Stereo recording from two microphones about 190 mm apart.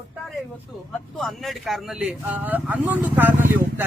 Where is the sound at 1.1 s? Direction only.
Centre (ahead or behind).